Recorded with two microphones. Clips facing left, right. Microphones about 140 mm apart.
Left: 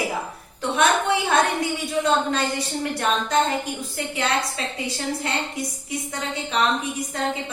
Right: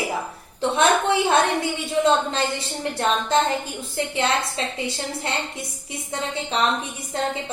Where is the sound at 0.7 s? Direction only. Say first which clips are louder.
Right 1 dB; 25° right (ahead or behind).